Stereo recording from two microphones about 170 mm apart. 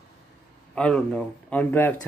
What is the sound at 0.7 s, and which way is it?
Speech, 5° left (ahead or behind).